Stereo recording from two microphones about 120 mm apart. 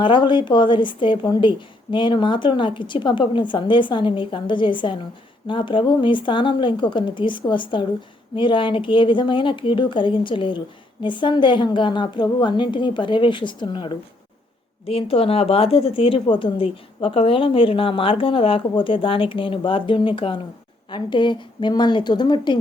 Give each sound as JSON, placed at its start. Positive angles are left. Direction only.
{"t": 0.0, "sound": "a woman's voice", "side_deg": 40}
{"t": 14.8, "sound": "a woman's voice", "side_deg": 50}